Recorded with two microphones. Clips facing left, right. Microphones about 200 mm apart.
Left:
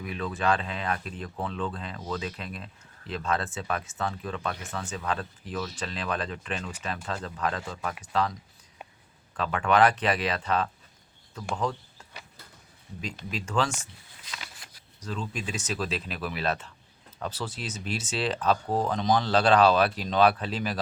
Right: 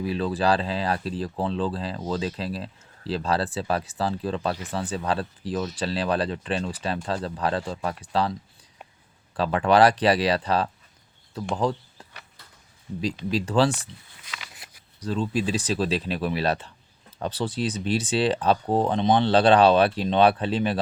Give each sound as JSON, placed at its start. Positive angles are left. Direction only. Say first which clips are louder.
{"t": 0.0, "sound": "speech", "louder": "right 5 dB", "side_deg": -30}
{"t": 13.3, "sound": "speech", "louder": "right 7 dB", "side_deg": -35}
{"t": 15.0, "sound": "speech", "louder": "right 9 dB", "side_deg": -35}